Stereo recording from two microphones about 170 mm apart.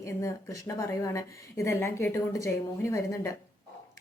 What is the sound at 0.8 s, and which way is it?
A woman's voice, 20° left (ahead or behind).